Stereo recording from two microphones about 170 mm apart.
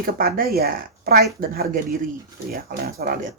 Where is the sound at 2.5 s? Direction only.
60° right (ahead or behind).